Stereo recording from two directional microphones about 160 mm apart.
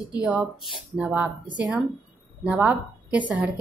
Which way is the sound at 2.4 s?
10° right (ahead or behind).